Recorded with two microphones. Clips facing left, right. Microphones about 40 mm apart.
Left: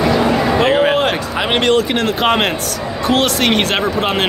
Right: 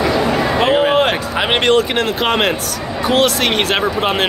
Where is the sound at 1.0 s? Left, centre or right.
Right.